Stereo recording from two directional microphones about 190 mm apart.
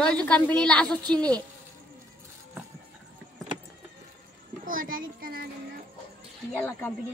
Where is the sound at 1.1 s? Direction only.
20° right (ahead or behind).